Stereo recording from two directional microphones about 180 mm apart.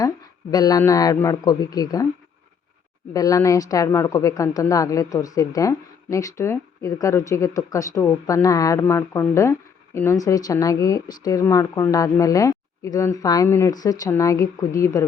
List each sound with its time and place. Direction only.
0.5 s a man's voice: 20° left (ahead or behind)
3.1 s a woman's voice: 20° left (ahead or behind)